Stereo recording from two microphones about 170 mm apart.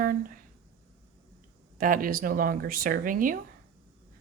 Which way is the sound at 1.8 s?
55° right (ahead or behind).